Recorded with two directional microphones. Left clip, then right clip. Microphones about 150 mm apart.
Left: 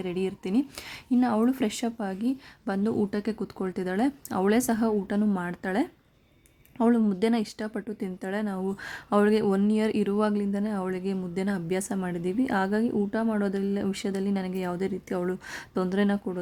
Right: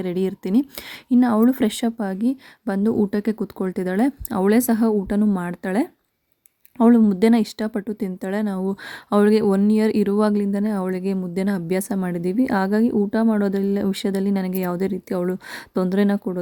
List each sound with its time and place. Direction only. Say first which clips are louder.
0.0 s speech: right 6 dB; 35° right (ahead or behind)